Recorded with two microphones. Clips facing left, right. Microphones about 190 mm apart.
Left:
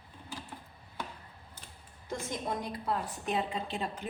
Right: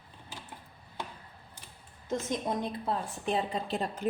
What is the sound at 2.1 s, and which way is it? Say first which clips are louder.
A woman's voice: right 4 dB; 20° right (ahead or behind).